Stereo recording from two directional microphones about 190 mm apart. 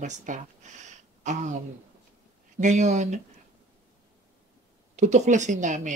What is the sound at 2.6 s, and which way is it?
Speech, 40° right (ahead or behind).